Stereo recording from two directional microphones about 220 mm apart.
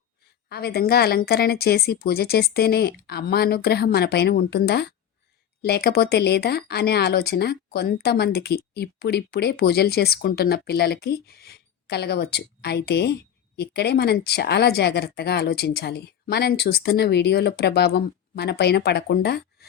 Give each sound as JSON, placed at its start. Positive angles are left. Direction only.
{"t": 0.4, "sound": "speech", "side_deg": 45}